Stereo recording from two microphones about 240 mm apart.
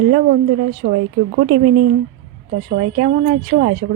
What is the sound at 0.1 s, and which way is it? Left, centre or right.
A woman's voice, right.